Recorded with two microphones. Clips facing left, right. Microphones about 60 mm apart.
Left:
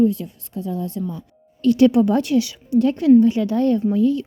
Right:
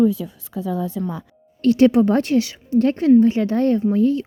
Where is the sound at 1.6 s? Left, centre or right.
Right.